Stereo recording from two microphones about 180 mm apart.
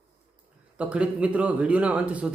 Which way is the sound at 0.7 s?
5° right (ahead or behind).